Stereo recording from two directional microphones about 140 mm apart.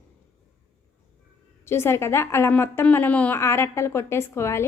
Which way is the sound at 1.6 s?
20° left (ahead or behind).